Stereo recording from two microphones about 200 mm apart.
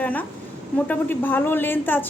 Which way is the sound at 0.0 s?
5° left (ahead or behind).